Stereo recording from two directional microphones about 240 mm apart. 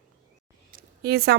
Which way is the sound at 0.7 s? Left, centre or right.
Right.